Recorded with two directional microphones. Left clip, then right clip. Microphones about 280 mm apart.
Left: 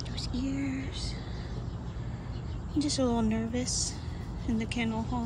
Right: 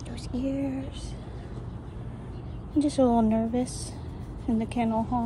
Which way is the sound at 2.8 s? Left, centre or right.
Centre.